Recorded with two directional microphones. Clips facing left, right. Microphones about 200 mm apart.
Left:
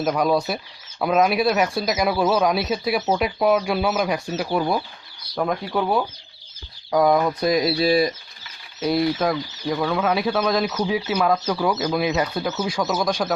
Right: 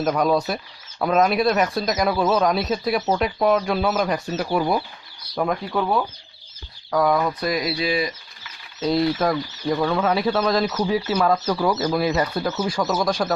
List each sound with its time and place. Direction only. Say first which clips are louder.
0.0 s speech: even; 5° left (ahead or behind)
6.9 s speech: left 2 dB; 20° left (ahead or behind)
7.6 s speech: left 5 dB; 35° left (ahead or behind)
8.8 s speech: even; 5° left (ahead or behind)